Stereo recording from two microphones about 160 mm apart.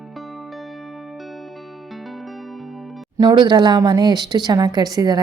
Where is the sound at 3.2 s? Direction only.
25° right (ahead or behind).